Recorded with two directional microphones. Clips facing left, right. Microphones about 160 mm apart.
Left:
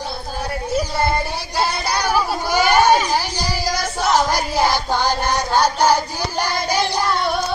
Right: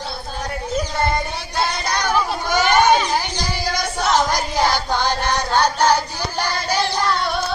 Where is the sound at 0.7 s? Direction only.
10° left (ahead or behind).